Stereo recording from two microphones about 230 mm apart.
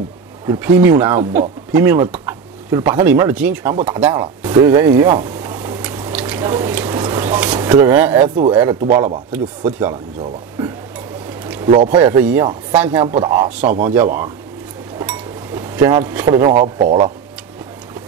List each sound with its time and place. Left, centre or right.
0.5 s speech: centre
4.6 s drip: centre
8.5 s speech: centre
11.2 s a sound: centre
11.7 s speech: right
12.0 s speech: centre
13.0 s speech: centre